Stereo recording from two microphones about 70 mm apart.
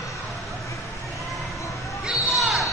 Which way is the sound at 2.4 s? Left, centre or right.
Centre.